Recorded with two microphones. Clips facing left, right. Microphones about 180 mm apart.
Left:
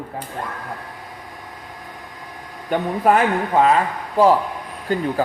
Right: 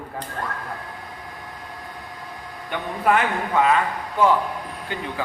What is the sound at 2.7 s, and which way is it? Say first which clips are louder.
Speech: left 4 dB; 40° left (ahead or behind).